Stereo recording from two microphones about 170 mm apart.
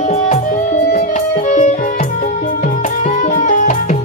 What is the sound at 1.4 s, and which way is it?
Music, 50° left (ahead or behind).